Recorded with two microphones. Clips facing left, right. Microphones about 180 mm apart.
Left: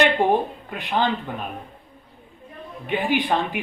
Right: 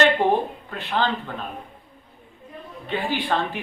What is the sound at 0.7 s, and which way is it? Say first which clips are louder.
Speech: left 2 dB; 15° left (ahead or behind).